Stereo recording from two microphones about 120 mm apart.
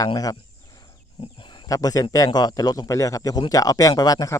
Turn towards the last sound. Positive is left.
turn(degrees=30)  # may be behind; listen again after turning